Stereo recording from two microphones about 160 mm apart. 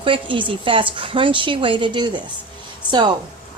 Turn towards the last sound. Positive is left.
turn(degrees=-30)  # may be behind; listen again after turning